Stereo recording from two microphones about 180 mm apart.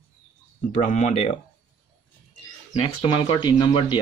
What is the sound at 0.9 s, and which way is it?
Speech, 40° left (ahead or behind).